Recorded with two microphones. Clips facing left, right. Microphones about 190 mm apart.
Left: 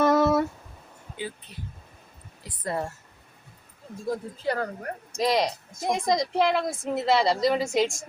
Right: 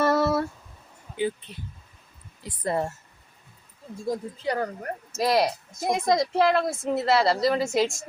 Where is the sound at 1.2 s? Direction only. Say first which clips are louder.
Right 8 dB; 15° right (ahead or behind).